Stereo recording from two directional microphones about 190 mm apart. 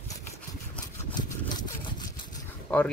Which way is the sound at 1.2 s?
20° left (ahead or behind).